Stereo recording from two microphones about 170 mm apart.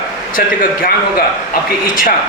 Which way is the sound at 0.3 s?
55° left (ahead or behind).